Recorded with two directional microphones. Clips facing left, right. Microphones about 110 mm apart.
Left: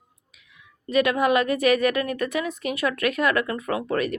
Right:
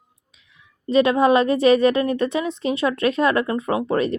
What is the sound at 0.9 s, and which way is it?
A woman's voice, 30° right (ahead or behind).